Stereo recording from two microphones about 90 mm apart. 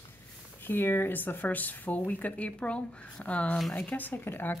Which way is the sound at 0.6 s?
25° left (ahead or behind).